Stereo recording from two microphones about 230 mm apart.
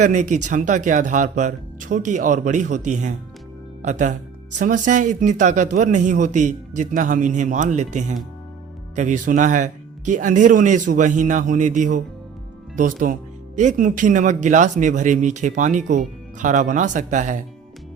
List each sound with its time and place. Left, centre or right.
0.0 s a man's voice: right